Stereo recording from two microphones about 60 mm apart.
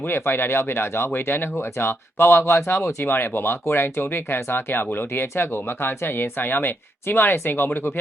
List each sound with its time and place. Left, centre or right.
0.1 s speech: left